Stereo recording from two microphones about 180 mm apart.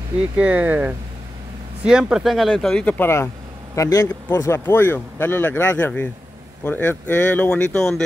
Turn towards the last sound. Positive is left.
turn(degrees=5)  # may be behind; listen again after turning